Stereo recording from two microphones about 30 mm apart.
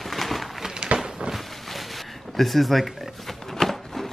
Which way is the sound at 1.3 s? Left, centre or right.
Centre.